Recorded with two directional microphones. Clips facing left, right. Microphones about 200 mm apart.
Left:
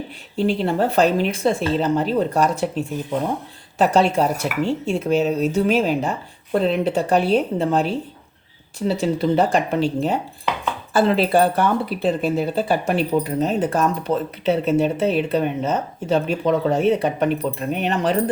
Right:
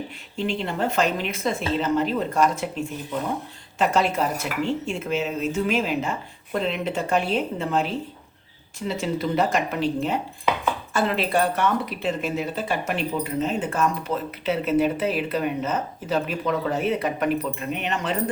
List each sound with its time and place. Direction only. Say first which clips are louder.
0.3 s speech: left 7 dB; 35° left (ahead or behind)
3.8 s speech: left 5 dB; 30° left (ahead or behind)
8.9 s speech: left 6 dB; 30° left (ahead or behind)